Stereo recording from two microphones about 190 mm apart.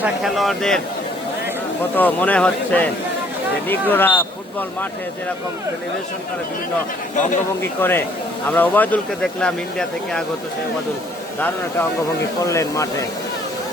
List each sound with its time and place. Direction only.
0.0 s speech: centre (ahead or behind)
2.0 s speech: 10° left (ahead or behind)
7.6 s speech: 10° left (ahead or behind)
11.3 s speech: 10° left (ahead or behind)